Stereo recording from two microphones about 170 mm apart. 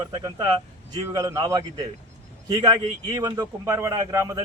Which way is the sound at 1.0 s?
20° right (ahead or behind).